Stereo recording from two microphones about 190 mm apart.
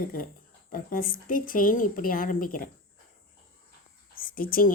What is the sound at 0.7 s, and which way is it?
A woman's voice, 45° left (ahead or behind).